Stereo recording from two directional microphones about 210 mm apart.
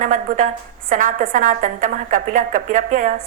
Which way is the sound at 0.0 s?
40° right (ahead or behind).